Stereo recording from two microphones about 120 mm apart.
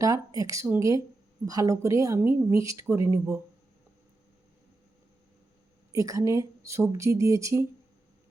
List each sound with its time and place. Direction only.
0.0 s speech: 30° right (ahead or behind)
5.9 s speech: 25° right (ahead or behind)